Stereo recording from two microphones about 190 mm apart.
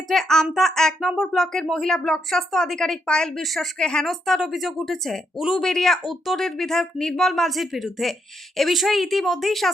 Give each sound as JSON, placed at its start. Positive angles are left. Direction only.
{"t": 0.1, "sound": "speech", "side_deg": 0}